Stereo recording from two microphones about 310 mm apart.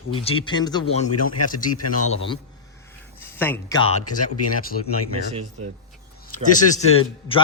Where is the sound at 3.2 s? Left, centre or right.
Centre.